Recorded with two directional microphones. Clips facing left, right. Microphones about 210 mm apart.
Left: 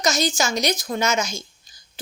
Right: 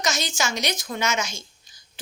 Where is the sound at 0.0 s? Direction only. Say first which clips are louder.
Left 5 dB; 40° left (ahead or behind).